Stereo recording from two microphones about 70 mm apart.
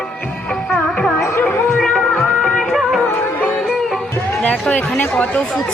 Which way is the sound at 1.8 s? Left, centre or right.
Centre.